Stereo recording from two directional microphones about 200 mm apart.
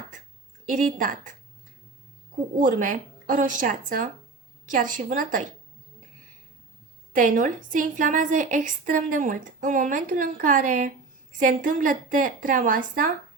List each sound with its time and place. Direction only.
0.7 s a woman's voice: 40° right (ahead or behind)
2.6 s a woman's voice: 40° right (ahead or behind)
7.1 s a woman's voice: 40° right (ahead or behind)